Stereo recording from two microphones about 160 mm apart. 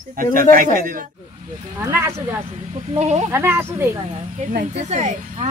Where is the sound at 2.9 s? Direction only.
45° right (ahead or behind).